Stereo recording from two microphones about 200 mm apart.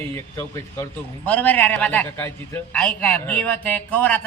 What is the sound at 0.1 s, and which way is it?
A man's voice, 15° left (ahead or behind).